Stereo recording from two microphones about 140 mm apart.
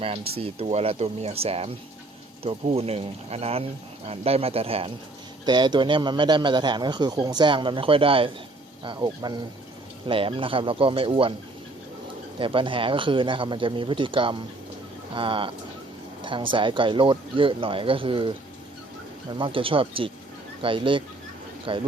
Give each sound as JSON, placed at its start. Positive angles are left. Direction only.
{"t": 0.0, "sound": "speech", "side_deg": -45}
{"t": 5.5, "sound": "a man's voice", "side_deg": -30}
{"t": 10.1, "sound": "a man's voice", "side_deg": -40}
{"t": 12.4, "sound": "a man's voice", "side_deg": -40}